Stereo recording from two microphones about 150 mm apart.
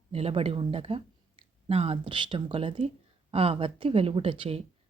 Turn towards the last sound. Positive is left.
turn(degrees=-35)  # may be behind; listen again after turning